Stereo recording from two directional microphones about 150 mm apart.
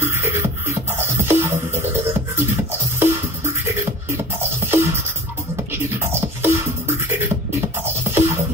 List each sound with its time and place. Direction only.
0.0 s music: 15° right (ahead or behind)
6.4 s beatboxing: 15° right (ahead or behind)
7.8 s music: 15° right (ahead or behind)